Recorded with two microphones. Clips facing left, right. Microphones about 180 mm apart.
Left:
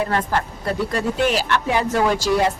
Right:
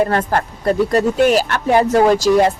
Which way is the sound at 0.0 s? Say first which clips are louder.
Right 5 dB; 45° right (ahead or behind).